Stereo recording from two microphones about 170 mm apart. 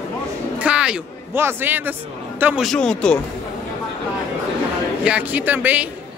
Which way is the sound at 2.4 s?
Centre (ahead or behind).